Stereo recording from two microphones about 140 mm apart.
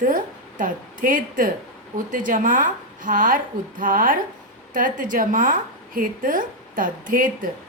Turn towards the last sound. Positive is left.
turn(degrees=-75)  # may be behind; listen again after turning